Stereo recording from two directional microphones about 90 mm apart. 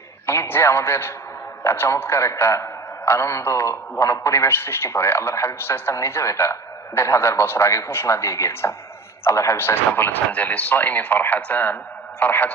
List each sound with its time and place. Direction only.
0.3 s a man's voice: 25° left (ahead or behind)